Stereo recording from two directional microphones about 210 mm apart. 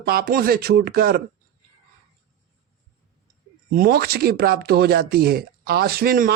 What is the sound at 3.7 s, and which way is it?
A man's voice, 45° right (ahead or behind).